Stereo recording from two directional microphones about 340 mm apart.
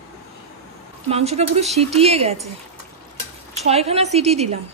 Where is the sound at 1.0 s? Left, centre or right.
Centre.